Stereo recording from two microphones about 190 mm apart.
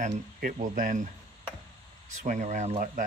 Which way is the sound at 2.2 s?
40° right (ahead or behind).